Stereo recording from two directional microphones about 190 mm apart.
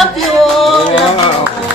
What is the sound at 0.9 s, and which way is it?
Speech, 30° left (ahead or behind).